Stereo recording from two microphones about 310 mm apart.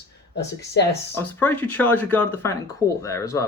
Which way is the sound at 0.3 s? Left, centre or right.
Left.